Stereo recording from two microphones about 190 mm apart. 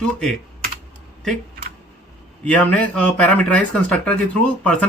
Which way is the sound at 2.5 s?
5° left (ahead or behind).